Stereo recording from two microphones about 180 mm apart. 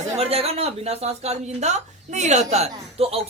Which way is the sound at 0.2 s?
35° right (ahead or behind).